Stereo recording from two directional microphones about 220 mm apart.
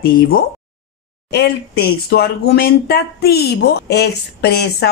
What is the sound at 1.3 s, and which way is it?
A woman's voice, 45° left (ahead or behind).